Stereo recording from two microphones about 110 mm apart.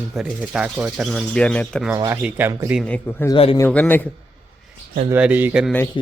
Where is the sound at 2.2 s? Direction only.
15° right (ahead or behind).